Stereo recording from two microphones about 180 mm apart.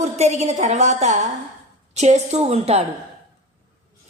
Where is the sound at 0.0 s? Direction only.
40° right (ahead or behind).